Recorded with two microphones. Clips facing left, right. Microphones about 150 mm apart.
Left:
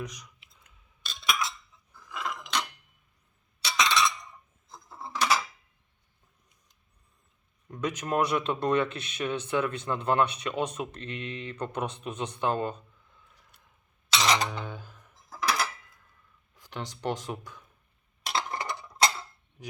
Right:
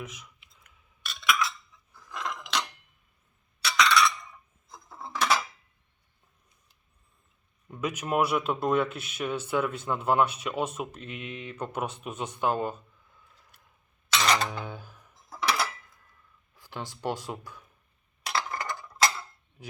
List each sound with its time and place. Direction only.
2.0 s a sound: 5° left (ahead or behind)
3.6 s chink: 25° left (ahead or behind)
4.7 s coin: centre (ahead or behind)
7.7 s speech: 10° right (ahead or behind)
14.2 s a sound: 15° left (ahead or behind)
14.6 s music: 10° right (ahead or behind)
15.3 s dishes: 5° left (ahead or behind)
16.6 s speech: 10° right (ahead or behind)
18.3 s tick-tock: 25° left (ahead or behind)